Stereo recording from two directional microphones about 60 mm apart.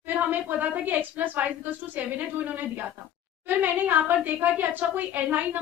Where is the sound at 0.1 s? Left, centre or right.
Right.